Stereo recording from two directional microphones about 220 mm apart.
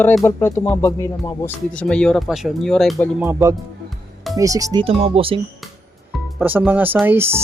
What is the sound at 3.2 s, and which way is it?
Speech, 10° right (ahead or behind).